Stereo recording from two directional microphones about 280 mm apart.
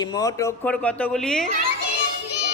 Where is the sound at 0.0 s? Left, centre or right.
Centre.